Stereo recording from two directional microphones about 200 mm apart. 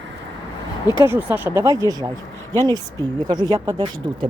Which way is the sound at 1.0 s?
10° right (ahead or behind).